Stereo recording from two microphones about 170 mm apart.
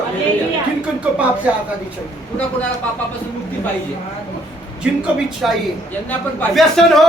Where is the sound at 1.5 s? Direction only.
5° right (ahead or behind).